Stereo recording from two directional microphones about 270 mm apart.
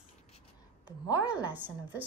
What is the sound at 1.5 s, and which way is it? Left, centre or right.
Speech, centre.